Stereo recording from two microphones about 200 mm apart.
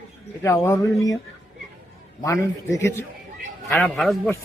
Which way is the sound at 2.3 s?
15° left (ahead or behind).